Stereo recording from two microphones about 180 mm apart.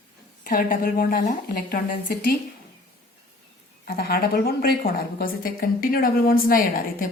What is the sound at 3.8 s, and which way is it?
A woman's voice, 60° left (ahead or behind).